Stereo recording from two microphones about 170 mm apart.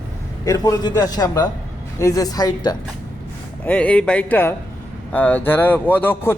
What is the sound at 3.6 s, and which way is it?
A man's voice, 5° left (ahead or behind).